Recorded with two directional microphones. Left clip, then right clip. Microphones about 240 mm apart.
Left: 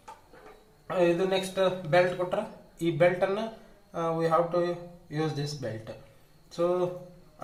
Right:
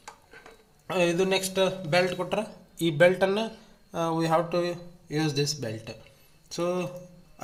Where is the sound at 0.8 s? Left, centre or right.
Right.